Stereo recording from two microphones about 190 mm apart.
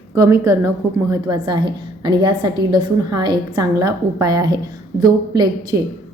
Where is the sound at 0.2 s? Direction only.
15° right (ahead or behind).